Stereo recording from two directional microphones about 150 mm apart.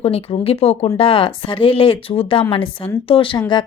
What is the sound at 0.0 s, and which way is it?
Speech, 40° left (ahead or behind).